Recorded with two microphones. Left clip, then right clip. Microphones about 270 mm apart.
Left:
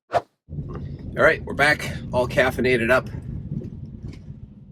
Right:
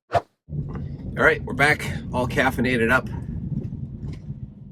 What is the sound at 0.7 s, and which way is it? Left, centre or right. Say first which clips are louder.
Speech: left 3 dB; centre.